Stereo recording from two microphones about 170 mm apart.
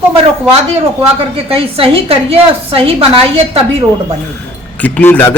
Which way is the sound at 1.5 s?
35° right (ahead or behind).